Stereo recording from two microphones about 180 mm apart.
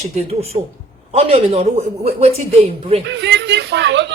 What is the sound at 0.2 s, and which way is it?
A man's voice, 35° right (ahead or behind).